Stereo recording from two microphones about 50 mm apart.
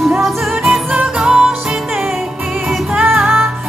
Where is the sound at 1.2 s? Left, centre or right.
Centre.